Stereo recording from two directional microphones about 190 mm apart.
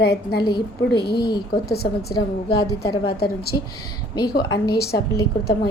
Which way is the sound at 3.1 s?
55° left (ahead or behind).